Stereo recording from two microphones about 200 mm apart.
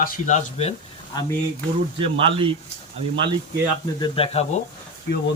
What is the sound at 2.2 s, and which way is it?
Speech, 25° right (ahead or behind).